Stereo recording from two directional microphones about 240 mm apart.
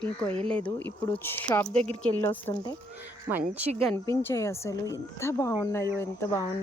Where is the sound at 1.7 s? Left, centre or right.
Right.